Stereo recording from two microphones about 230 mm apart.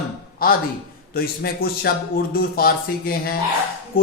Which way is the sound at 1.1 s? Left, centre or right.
Left.